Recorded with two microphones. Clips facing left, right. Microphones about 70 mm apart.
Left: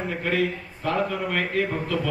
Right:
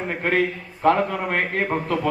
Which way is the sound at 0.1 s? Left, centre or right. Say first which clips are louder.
Right 4 dB; right.